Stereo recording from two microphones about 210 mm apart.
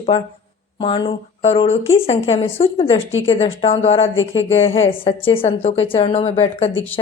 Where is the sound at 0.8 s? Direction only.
25° left (ahead or behind).